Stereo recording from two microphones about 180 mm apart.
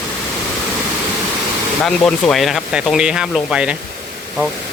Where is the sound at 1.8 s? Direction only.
5° left (ahead or behind).